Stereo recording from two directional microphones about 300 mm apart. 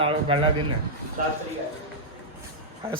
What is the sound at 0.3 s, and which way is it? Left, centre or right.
Speech, centre.